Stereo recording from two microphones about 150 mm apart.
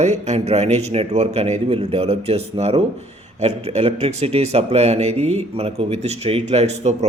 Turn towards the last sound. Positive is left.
turn(degrees=-45)  # may be behind; listen again after turning